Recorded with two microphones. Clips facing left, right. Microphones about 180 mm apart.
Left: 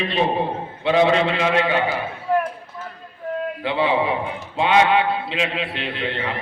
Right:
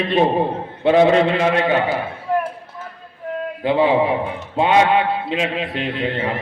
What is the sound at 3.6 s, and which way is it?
A man's voice, 45° right (ahead or behind).